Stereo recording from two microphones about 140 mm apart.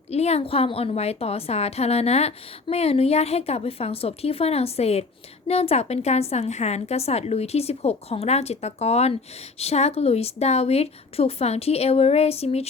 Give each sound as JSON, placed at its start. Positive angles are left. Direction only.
{"t": 0.1, "sound": "a woman's voice", "side_deg": 50}